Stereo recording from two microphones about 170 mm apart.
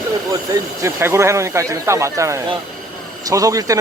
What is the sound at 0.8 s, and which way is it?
Speech, 15° right (ahead or behind).